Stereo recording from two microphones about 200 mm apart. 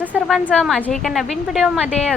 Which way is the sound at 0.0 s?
5° right (ahead or behind).